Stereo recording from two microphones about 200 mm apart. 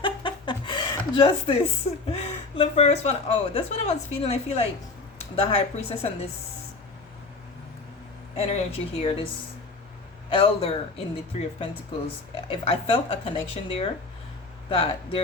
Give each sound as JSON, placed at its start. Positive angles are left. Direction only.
{"t": 0.0, "sound": "chuckle", "side_deg": 25}
{"t": 2.1, "sound": "speech", "side_deg": 30}
{"t": 8.4, "sound": "speech", "side_deg": 30}
{"t": 10.2, "sound": "speech", "side_deg": 25}
{"t": 12.5, "sound": "speech", "side_deg": 25}